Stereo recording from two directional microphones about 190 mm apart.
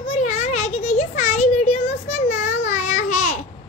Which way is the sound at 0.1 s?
35° left (ahead or behind).